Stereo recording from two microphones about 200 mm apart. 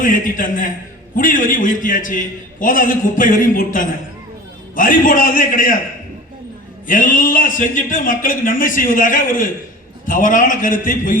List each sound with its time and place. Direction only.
0.0 s a man's voice: 40° left (ahead or behind)
6.8 s speech: 40° left (ahead or behind)